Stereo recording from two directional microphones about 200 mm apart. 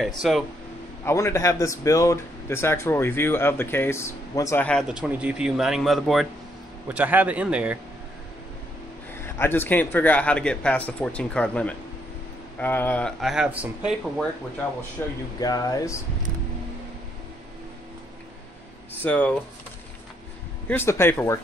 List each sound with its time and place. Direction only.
0.0 s speech: centre (ahead or behind)
1.0 s speech: 15° left (ahead or behind)
4.8 s a man's voice: 5° right (ahead or behind)
9.2 s speech: 10° left (ahead or behind); by 14.2 s 5° right (ahead or behind)
15.0 s speech: 10° left (ahead or behind)
19.0 s speech: 5° left (ahead or behind)
20.6 s speech: 10° left (ahead or behind)